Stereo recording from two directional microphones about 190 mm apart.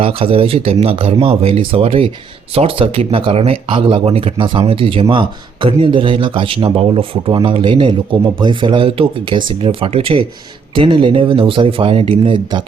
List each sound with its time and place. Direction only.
0.0 s speech: 30° right (ahead or behind)